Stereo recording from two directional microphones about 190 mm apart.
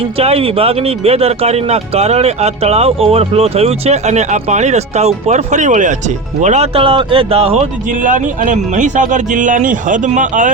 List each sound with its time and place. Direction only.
0.2 s speech: 30° right (ahead or behind)